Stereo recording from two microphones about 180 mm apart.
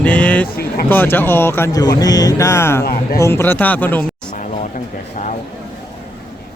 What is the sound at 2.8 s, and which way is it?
Speech, 55° left (ahead or behind).